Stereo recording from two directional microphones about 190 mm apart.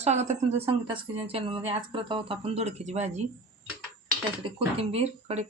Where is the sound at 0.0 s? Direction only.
35° right (ahead or behind).